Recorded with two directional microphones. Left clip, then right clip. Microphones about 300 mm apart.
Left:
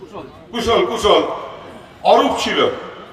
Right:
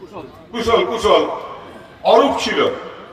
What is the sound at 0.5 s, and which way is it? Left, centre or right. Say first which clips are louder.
A man's voice: even; left.